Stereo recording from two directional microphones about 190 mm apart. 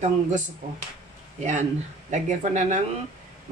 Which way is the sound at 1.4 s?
40° right (ahead or behind).